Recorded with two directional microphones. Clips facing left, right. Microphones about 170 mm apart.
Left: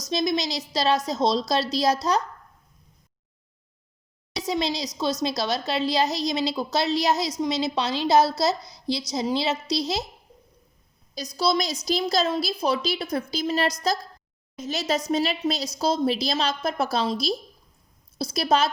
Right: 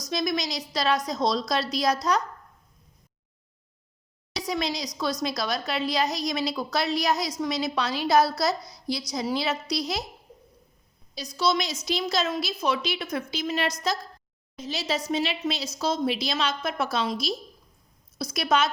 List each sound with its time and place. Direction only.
0.0 s a woman's voice: 25° left (ahead or behind)
4.4 s a woman's voice: 25° left (ahead or behind)
11.1 s a woman's voice: 40° left (ahead or behind)